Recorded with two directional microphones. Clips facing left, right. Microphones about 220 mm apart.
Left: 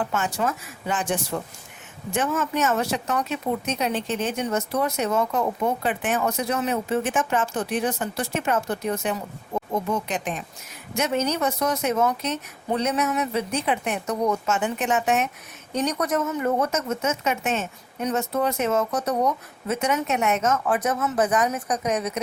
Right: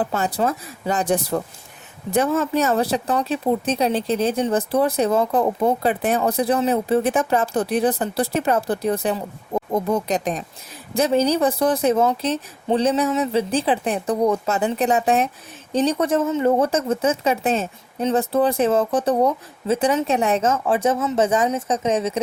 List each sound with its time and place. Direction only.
0.0 s speech: 35° right (ahead or behind)